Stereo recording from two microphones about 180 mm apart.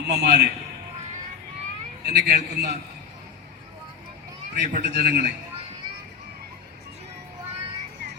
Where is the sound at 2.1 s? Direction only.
65° right (ahead or behind).